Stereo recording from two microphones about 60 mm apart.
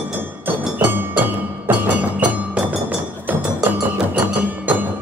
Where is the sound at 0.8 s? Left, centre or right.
Right.